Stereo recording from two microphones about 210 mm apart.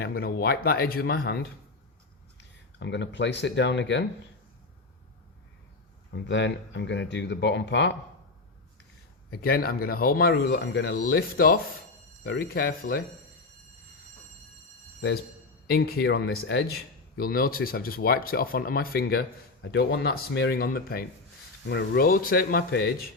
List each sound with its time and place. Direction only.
0.0 s speech: 45° left (ahead or behind)
2.7 s speech: 55° left (ahead or behind)
6.1 s speech: 55° left (ahead or behind)
9.4 s speech: 45° left (ahead or behind)
15.6 s speech: 50° left (ahead or behind)
17.2 s speech: 45° left (ahead or behind)